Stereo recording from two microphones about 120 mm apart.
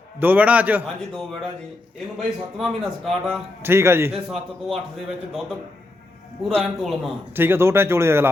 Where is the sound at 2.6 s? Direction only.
Centre (ahead or behind).